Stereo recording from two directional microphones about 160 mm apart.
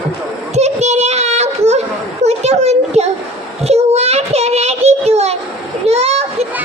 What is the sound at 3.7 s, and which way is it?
Child singing, 40° right (ahead or behind).